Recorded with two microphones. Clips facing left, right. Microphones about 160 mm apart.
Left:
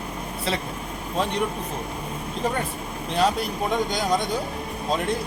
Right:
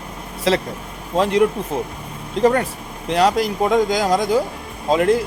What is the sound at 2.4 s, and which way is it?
Speech, 75° right (ahead or behind).